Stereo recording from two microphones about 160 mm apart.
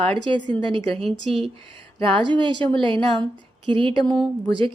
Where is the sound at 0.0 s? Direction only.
35° right (ahead or behind).